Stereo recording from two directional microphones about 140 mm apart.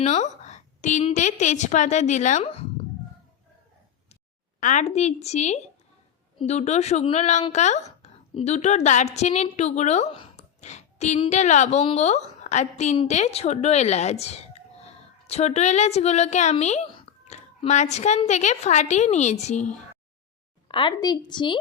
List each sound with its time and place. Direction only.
0.0 s a woman's voice: 55° left (ahead or behind)
4.6 s a woman's voice: 60° left (ahead or behind)
20.7 s a woman's voice: 35° left (ahead or behind)